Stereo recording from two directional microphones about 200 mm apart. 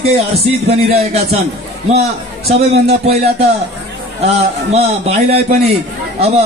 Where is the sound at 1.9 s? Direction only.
30° right (ahead or behind).